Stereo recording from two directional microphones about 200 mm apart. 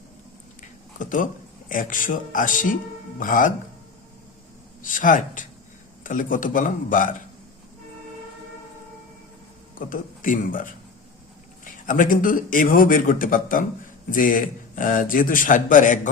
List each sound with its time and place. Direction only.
0.6 s a sound: 40° left (ahead or behind)
1.7 s a man's voice: 40° left (ahead or behind)
4.8 s a man's voice: 40° left (ahead or behind)
9.7 s a man's voice: 40° left (ahead or behind)